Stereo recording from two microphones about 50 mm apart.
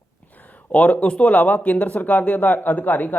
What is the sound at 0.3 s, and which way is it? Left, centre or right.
Speech, left.